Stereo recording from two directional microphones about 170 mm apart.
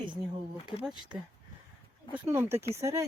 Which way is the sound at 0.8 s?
5° right (ahead or behind).